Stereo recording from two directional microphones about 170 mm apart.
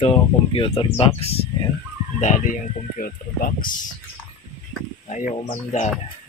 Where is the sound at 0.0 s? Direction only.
35° left (ahead or behind); by 3.7 s 55° left (ahead or behind).